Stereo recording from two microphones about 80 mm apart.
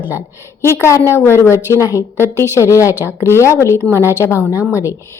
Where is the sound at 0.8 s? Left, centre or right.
Left.